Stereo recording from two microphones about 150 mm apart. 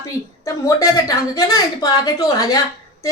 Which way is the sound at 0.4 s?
20° left (ahead or behind).